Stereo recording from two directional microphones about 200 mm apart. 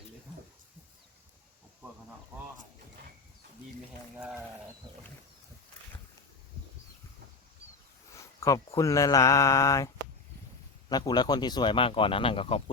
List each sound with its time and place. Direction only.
4.2 s sheep: 5° right (ahead or behind)
8.1 s speech: 15° left (ahead or behind)